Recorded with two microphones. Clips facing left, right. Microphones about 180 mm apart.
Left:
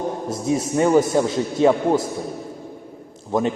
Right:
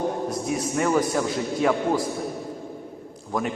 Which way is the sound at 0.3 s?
25° left (ahead or behind).